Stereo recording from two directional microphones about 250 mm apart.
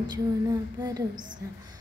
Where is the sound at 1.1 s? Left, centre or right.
Right.